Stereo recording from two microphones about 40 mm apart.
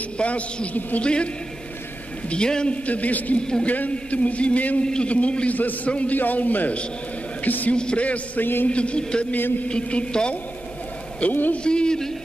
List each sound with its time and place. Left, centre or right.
0.2 s a man's voice: left
2.7 s a man's voice: left
3.3 s a man's voice: centre
3.6 s a man's voice: left
5.5 s a man's voice: left
5.9 s a man's voice: left
6.1 s a man's voice: left
7.4 s a sound: left
7.7 s a man's voice: left
8.4 s a man's voice: left
8.6 s a man's voice: left
11.2 s a man's voice: left
11.5 s a man's voice: left